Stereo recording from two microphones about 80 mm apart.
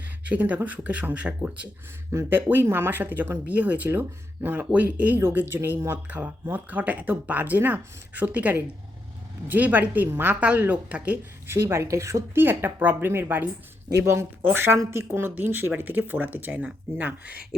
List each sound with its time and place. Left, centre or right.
0.3 s speech: centre
2.1 s speech: right
11.4 s speech: right; by 17.4 s centre